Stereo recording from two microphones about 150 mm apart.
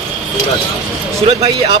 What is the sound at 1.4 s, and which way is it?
Speech, 30° right (ahead or behind).